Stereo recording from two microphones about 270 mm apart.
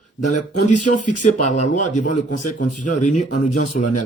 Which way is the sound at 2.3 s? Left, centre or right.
Left.